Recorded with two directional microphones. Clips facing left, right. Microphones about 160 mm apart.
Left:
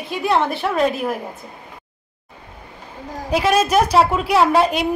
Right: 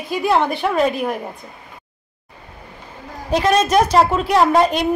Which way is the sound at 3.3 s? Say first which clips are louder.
Right 1 dB; 5° left (ahead or behind).